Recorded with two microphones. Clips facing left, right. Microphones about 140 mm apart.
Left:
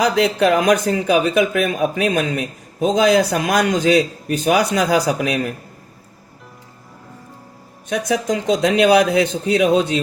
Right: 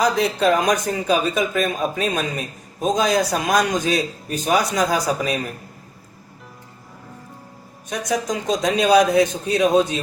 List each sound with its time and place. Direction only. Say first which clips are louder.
0.0 s speech: left 3 dB; 75° left (ahead or behind)
7.9 s speech: left 4 dB; 70° left (ahead or behind)